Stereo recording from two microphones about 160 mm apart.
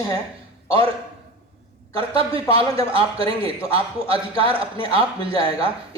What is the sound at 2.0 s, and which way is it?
A man's voice, 35° right (ahead or behind).